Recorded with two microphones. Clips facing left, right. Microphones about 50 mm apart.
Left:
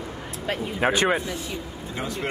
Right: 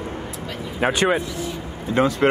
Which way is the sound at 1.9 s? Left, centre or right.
Right.